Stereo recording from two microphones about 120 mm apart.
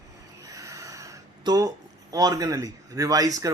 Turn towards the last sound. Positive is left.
turn(degrees=-30)  # may be behind; listen again after turning